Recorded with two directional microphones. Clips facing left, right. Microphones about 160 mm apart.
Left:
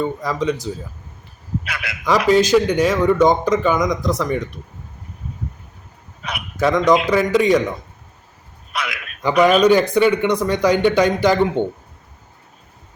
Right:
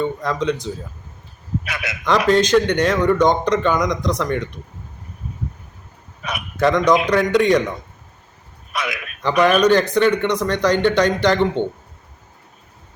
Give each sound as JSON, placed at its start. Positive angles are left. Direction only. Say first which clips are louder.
{"t": 0.0, "sound": "a man's voice", "louder": "even", "side_deg": 5}
{"t": 1.7, "sound": "a man's voice", "louder": "right 2 dB", "side_deg": -25}
{"t": 2.2, "sound": "a man's voice", "louder": "left 1 dB", "side_deg": 5}
{"t": 6.6, "sound": "a man's voice", "louder": "even", "side_deg": 0}
{"t": 9.2, "sound": "speech", "louder": "left 2 dB", "side_deg": 10}